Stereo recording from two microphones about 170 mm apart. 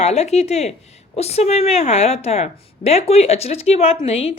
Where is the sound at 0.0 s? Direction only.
40° left (ahead or behind).